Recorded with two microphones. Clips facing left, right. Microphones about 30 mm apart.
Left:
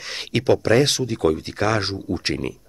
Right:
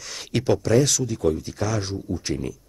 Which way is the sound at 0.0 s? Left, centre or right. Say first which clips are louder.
Left 5 dB; left.